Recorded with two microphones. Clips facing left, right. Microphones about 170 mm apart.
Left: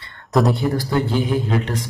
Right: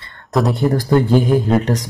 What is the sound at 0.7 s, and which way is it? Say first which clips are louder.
Speech: right 6 dB; 45° right (ahead or behind).